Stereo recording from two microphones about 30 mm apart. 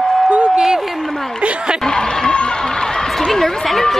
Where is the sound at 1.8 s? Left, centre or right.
Left.